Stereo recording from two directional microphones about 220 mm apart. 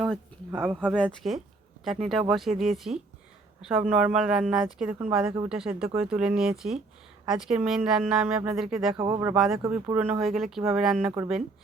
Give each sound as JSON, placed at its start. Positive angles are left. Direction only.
{"t": 0.5, "sound": "speech", "side_deg": -5}
{"t": 9.0, "sound": "speech", "side_deg": -25}
{"t": 9.2, "sound": "speech", "side_deg": 0}
{"t": 9.6, "sound": "speech", "side_deg": -10}